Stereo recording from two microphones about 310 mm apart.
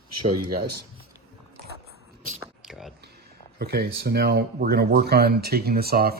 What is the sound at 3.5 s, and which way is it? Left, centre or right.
Speech, right.